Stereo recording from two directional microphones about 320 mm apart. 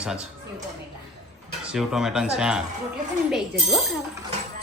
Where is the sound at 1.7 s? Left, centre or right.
Centre.